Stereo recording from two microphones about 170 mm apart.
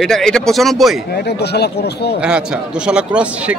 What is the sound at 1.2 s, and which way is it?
Speech, 75° left (ahead or behind).